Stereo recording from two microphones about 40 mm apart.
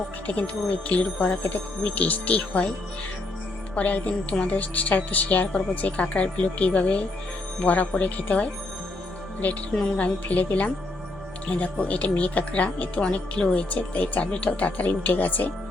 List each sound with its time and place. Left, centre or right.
0.3 s speech: left
3.8 s speech: left
6.0 s speech: left
15.0 s speech: left